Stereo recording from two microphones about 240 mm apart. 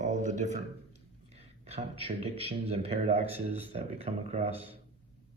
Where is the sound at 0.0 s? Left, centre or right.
Right.